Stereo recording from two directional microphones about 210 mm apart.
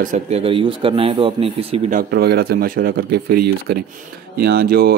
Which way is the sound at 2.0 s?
45° right (ahead or behind).